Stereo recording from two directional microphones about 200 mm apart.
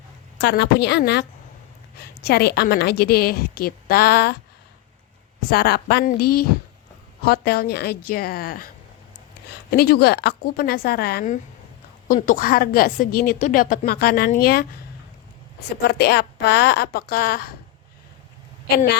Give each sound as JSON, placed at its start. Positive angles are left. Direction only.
{"t": 0.3, "sound": "a woman's voice", "side_deg": 55}
{"t": 5.5, "sound": "a woman's voice", "side_deg": 50}
{"t": 15.9, "sound": "a woman's voice", "side_deg": 55}